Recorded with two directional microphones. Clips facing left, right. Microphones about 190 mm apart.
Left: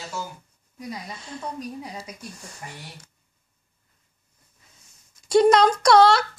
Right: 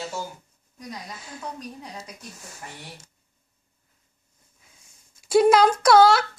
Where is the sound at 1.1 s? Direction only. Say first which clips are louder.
Left 3 dB; 5° right (ahead or behind).